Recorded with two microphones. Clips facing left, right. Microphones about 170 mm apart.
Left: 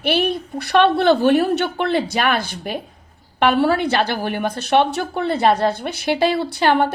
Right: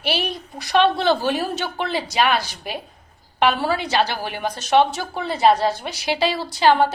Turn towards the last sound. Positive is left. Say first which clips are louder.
# even
turn(degrees=55)  # may be behind; listen again after turning